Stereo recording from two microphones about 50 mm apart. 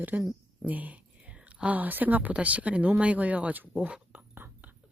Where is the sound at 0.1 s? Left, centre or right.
Right.